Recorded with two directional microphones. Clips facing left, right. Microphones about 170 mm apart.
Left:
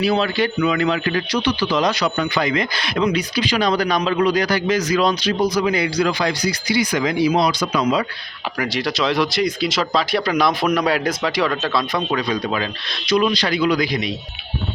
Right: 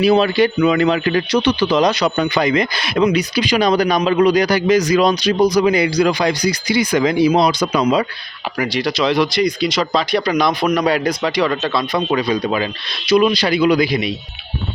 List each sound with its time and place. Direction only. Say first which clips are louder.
0.0 s a man's voice: right 6 dB; 15° right (ahead or behind)
8.5 s a man's voice: right 3 dB; centre (ahead or behind)